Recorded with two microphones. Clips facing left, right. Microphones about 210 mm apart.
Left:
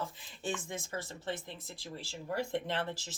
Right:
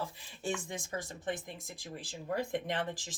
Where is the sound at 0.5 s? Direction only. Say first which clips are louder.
Right 1 dB; 15° right (ahead or behind).